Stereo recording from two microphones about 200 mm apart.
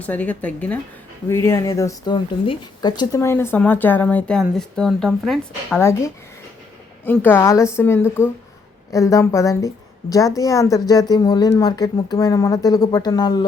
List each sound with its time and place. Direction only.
0.0 s speech: 5° left (ahead or behind)
5.8 s speech: 15° left (ahead or behind)